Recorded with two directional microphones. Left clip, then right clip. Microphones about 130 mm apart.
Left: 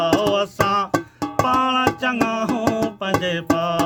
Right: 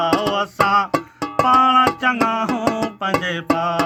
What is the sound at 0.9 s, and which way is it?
Music, 35° right (ahead or behind).